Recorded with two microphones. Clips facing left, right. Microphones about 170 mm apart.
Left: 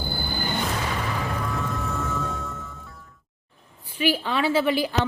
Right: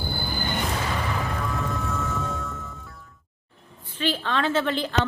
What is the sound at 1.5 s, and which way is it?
Music, centre (ahead or behind).